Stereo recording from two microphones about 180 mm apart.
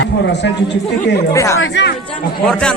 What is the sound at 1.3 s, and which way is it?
Speech, 15° left (ahead or behind).